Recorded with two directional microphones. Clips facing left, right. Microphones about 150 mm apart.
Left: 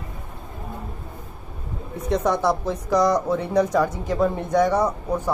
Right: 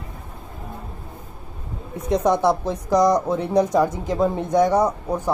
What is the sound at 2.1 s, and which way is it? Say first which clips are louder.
Speech: right 3 dB; 20° right (ahead or behind).